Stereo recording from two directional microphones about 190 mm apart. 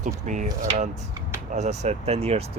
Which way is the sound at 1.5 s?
40° right (ahead or behind).